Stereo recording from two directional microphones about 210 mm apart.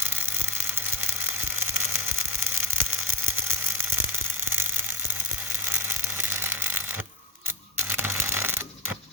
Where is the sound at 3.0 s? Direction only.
80° right.